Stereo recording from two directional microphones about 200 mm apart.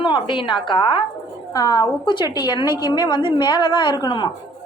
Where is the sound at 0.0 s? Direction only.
25° left (ahead or behind).